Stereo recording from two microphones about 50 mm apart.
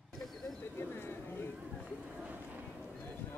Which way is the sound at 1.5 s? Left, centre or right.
Right.